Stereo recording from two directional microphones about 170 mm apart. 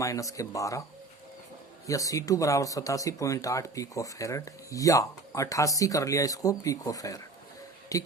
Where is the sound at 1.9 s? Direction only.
20° left (ahead or behind).